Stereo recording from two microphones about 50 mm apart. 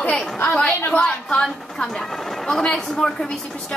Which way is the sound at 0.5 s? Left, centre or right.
Left.